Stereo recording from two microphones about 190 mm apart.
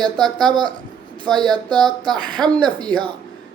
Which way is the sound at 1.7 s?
5° left (ahead or behind).